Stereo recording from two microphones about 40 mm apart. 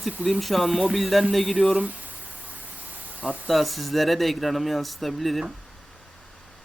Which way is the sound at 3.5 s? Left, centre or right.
Centre.